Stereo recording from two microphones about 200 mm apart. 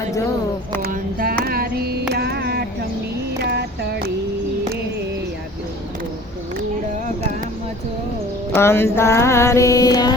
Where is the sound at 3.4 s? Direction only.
55° right (ahead or behind).